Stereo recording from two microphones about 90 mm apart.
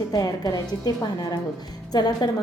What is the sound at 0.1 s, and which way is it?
Speech, 45° left (ahead or behind).